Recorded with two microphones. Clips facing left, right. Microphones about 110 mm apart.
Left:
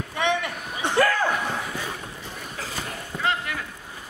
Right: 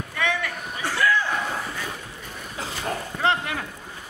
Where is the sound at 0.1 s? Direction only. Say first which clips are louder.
Left 2 dB; 20° left (ahead or behind).